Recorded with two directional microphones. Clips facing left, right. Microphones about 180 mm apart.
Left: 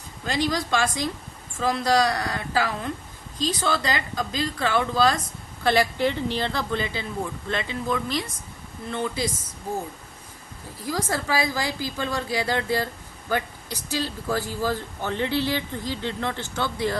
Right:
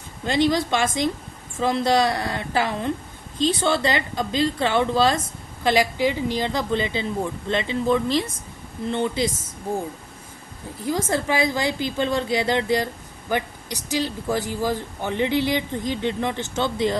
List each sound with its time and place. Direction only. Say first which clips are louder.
0.3 s a woman's voice: right 5 dB; 25° right (ahead or behind)
5.6 s a woman's voice: right 1 dB; 15° right (ahead or behind)
10.8 s a woman's voice: right 4 dB; 25° right (ahead or behind)